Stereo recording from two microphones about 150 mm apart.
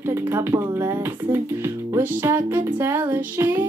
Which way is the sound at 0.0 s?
15° right (ahead or behind).